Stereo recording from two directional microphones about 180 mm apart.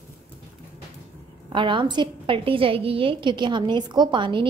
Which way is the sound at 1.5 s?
25° right (ahead or behind).